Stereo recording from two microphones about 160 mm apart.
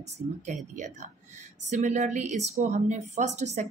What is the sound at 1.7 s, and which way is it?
A woman's voice, 45° right (ahead or behind).